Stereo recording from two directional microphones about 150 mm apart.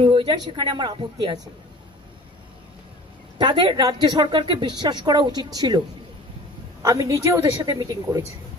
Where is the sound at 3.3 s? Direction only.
35° right (ahead or behind).